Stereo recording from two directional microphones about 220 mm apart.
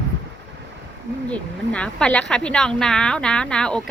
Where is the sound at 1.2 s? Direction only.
5° left (ahead or behind).